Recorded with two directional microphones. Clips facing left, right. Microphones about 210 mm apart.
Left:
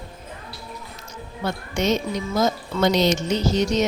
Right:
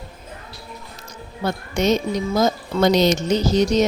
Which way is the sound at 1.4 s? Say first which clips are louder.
Right 3 dB; 40° right (ahead or behind).